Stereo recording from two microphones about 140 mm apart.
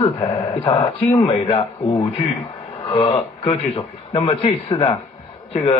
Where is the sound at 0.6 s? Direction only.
40° left (ahead or behind).